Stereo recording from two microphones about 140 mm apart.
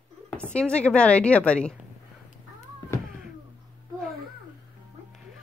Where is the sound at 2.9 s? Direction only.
20° left (ahead or behind).